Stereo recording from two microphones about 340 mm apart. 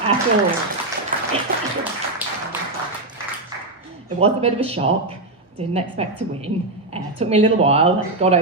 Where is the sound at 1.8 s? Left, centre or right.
Centre.